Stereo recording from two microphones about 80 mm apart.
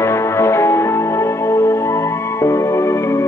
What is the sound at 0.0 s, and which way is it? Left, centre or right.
Music, left.